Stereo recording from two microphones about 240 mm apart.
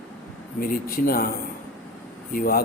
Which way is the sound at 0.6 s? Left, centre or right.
Left.